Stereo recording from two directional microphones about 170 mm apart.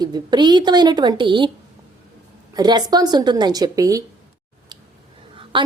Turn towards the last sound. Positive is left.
turn(degrees=-30)  # may be behind; listen again after turning